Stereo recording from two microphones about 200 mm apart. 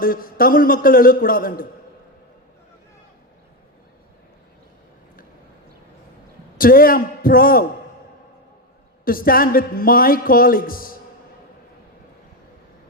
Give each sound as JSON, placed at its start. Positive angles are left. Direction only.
{"t": 0.0, "sound": "speech", "side_deg": 45}
{"t": 6.6, "sound": "speech", "side_deg": 45}
{"t": 9.0, "sound": "speech", "side_deg": 45}